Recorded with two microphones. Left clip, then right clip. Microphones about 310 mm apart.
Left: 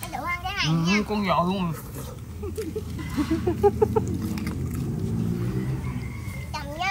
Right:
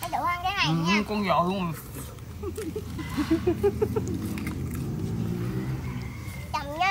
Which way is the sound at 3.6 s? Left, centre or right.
Centre.